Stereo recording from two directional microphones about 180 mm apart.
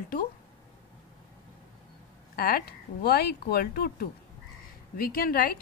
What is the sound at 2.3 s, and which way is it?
A woman's voice, 55° left (ahead or behind).